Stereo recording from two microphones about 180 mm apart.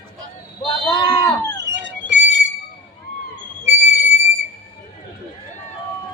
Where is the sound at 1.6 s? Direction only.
75° right (ahead or behind).